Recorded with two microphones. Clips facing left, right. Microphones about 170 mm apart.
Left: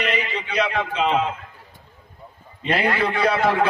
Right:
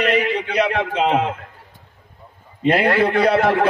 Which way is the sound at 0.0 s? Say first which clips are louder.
Right 7 dB; 55° right (ahead or behind).